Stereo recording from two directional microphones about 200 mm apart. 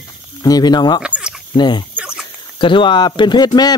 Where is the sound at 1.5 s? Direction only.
20° left (ahead or behind).